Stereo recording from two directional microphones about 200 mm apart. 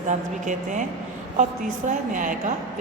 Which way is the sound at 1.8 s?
40° right (ahead or behind).